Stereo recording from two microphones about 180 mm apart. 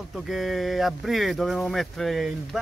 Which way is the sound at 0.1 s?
Centre (ahead or behind).